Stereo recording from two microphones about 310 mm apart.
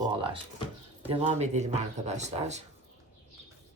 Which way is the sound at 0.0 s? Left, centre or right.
Centre.